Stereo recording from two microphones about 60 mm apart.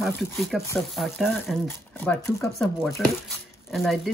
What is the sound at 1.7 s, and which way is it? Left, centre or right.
Speech, left.